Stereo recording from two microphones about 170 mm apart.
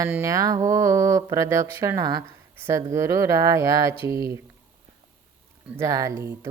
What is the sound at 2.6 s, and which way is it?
Speech, 15° right (ahead or behind).